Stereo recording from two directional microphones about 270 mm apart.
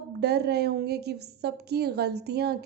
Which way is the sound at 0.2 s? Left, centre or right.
Right.